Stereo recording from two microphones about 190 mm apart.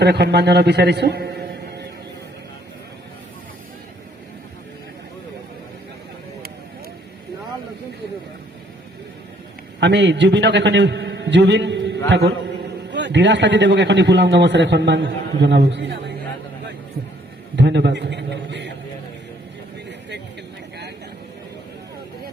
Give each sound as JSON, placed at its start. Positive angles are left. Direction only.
{"t": 0.0, "sound": "a man's voice", "side_deg": -60}
{"t": 9.8, "sound": "a man's voice", "side_deg": -65}
{"t": 17.6, "sound": "a man's voice", "side_deg": -65}